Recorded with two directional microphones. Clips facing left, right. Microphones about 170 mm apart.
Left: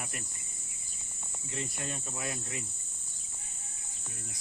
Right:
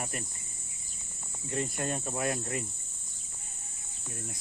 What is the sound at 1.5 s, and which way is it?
Cricket, 50° right (ahead or behind).